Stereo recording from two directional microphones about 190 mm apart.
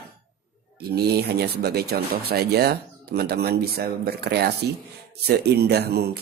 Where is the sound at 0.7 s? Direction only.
55° right (ahead or behind).